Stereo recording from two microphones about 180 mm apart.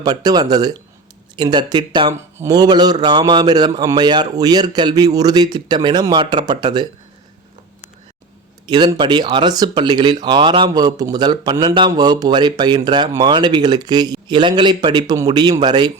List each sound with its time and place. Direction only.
0.0 s speech: 20° right (ahead or behind)
8.6 s speech: 25° right (ahead or behind)